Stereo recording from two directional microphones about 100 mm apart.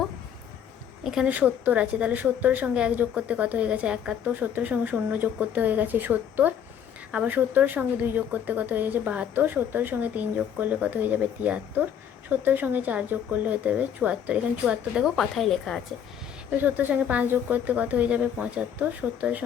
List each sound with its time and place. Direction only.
1.0 s a woman's voice: 5° right (ahead or behind)
1.3 s speech: 15° right (ahead or behind); by 15.8 s 5° left (ahead or behind)
16.5 s speech: 15° right (ahead or behind)